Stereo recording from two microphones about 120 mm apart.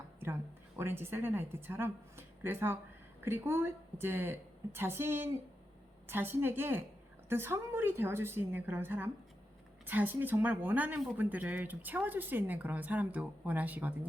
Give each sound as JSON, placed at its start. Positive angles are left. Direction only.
{"t": 0.8, "sound": "a woman's voice", "side_deg": -20}